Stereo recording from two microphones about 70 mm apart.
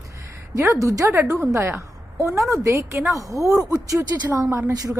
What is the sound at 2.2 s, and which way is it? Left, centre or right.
Speech, right.